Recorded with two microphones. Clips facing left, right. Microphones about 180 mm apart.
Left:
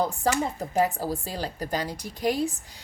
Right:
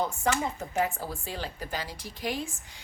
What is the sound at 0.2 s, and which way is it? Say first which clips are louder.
A woman's voice: left 3 dB; 35° left (ahead or behind).